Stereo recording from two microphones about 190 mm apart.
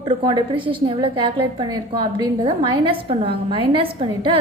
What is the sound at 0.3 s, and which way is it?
A woman's voice, 25° right (ahead or behind).